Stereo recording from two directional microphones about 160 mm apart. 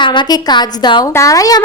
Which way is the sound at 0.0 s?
30° left (ahead or behind).